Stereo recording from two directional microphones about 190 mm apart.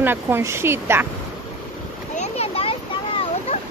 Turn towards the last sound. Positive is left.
turn(degrees=30)  # may be behind; listen again after turning